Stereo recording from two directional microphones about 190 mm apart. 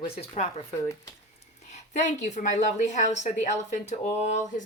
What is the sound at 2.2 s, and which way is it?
Speech, 40° left (ahead or behind).